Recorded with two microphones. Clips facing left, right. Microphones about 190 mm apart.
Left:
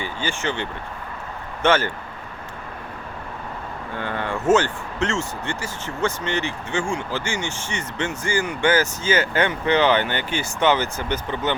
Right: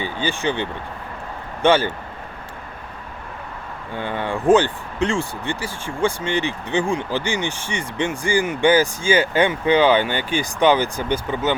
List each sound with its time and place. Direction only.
0.0 s speech: 15° right (ahead or behind)
3.9 s speech: 15° right (ahead or behind)